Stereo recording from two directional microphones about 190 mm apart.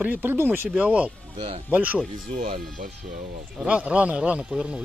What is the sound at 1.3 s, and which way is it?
Speech, 30° right (ahead or behind).